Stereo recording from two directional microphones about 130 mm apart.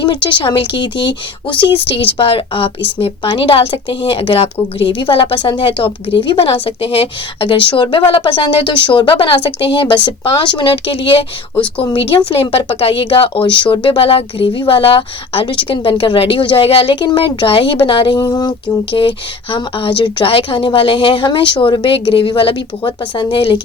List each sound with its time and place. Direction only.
0.0 s speech: 35° left (ahead or behind)